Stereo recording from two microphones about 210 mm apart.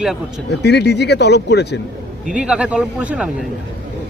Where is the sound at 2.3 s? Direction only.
5° right (ahead or behind).